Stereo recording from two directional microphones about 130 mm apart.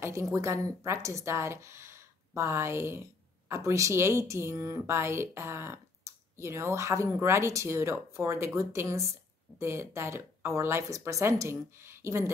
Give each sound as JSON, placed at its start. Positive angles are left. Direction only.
{"t": 0.0, "sound": "speech", "side_deg": -20}